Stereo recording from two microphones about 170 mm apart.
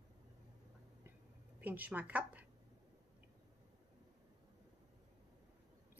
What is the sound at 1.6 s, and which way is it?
Speech, 10° right (ahead or behind).